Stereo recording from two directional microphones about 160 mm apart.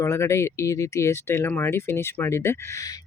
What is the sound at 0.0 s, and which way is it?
Speech, 15° left (ahead or behind).